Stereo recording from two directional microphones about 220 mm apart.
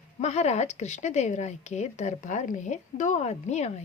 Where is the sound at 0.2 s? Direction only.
30° left (ahead or behind).